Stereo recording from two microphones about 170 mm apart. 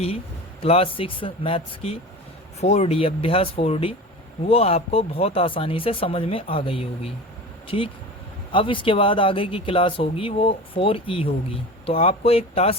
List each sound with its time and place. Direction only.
0.6 s speech: 35° left (ahead or behind)